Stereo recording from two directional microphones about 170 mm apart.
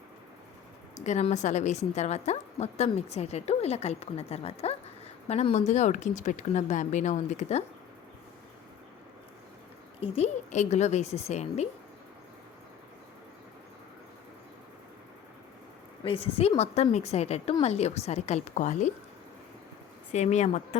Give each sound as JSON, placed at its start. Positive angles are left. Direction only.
{"t": 0.9, "sound": "a woman's voice", "side_deg": 40}
{"t": 10.0, "sound": "a woman's voice", "side_deg": 40}
{"t": 16.0, "sound": "a woman's voice", "side_deg": 35}
{"t": 20.1, "sound": "a woman's voice", "side_deg": 45}